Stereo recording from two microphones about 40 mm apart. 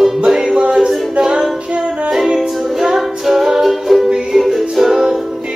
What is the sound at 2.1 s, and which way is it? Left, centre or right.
Music, centre.